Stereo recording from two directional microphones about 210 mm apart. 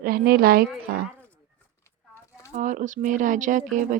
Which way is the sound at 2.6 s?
35° right (ahead or behind).